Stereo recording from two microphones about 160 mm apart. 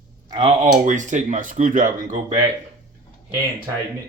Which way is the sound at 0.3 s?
30° right (ahead or behind).